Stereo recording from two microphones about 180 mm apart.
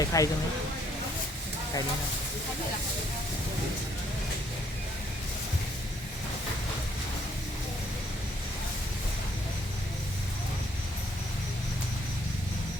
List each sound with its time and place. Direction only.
0.0 s speech: 20° left (ahead or behind)